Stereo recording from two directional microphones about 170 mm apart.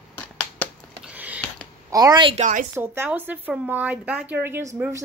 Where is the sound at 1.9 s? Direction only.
20° right (ahead or behind).